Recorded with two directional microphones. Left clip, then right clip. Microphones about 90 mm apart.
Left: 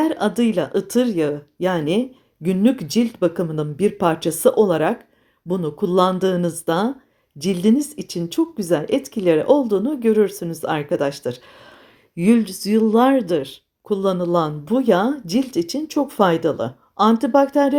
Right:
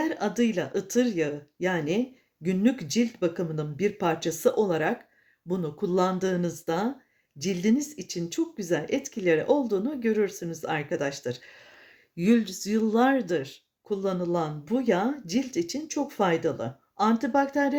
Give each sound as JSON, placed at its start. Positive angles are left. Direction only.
{"t": 0.1, "sound": "speech", "side_deg": 45}
{"t": 12.1, "sound": "speech", "side_deg": 30}